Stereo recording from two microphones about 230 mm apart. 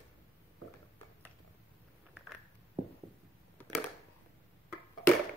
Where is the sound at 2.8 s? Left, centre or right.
Right.